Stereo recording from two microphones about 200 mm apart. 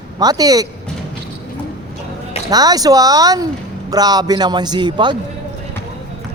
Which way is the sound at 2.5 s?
20° right (ahead or behind).